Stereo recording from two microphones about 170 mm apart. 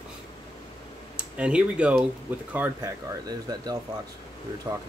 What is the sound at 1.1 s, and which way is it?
Speech, 5° right (ahead or behind).